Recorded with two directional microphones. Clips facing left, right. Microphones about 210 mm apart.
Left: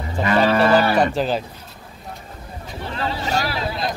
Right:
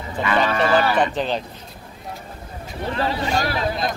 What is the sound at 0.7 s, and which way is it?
Speech, 40° left (ahead or behind).